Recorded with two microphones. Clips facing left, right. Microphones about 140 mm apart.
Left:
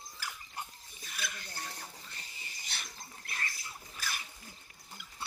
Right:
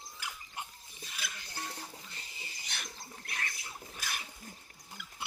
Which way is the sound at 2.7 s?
55° right (ahead or behind).